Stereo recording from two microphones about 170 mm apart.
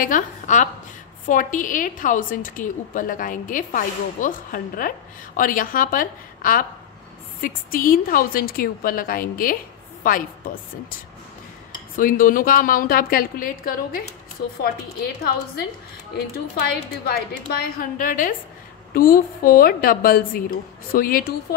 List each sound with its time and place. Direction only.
0.0 s a woman's voice: 50° left (ahead or behind)
12.0 s a woman's voice: 55° left (ahead or behind)
16.6 s a woman's voice: 65° left (ahead or behind)